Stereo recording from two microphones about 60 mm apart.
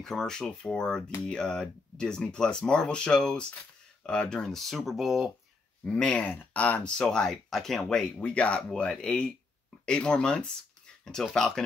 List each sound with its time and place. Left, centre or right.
0.0 s speech: centre
5.9 s speech: centre
7.0 s speech: centre
7.9 s speech: centre